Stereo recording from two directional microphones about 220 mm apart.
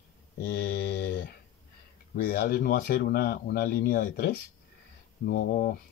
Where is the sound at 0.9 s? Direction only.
45° left (ahead or behind).